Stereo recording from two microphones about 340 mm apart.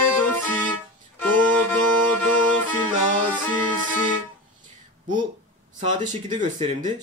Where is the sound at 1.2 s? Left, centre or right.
Centre.